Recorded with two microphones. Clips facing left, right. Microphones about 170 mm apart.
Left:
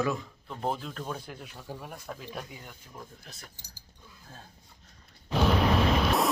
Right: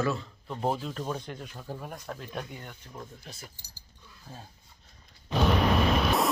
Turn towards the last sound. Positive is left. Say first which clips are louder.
# even
turn(degrees=0)  # may be behind; listen again after turning